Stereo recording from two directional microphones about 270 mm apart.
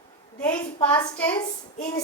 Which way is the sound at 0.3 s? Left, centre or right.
Centre.